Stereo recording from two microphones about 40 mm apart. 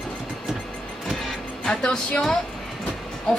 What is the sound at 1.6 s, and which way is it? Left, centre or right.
Speech, left.